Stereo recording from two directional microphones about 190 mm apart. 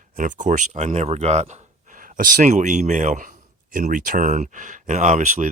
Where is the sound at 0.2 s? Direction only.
40° right (ahead or behind).